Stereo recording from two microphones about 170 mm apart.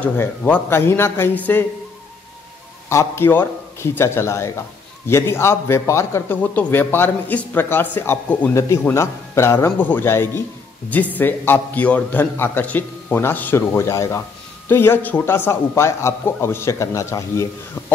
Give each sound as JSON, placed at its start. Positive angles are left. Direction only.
{"t": 0.0, "sound": "a man's voice", "side_deg": 10}
{"t": 2.9, "sound": "a man's voice", "side_deg": 15}